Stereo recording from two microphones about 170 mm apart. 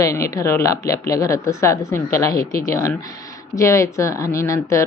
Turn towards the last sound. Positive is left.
turn(degrees=15)  # may be behind; listen again after turning